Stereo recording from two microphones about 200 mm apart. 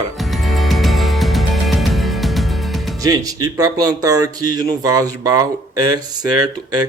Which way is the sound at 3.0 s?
20° right (ahead or behind).